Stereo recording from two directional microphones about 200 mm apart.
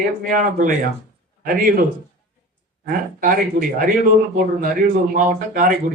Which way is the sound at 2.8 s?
45° right (ahead or behind).